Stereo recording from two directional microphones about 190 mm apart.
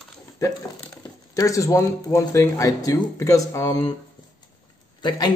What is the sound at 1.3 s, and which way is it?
Speech, 15° left (ahead or behind).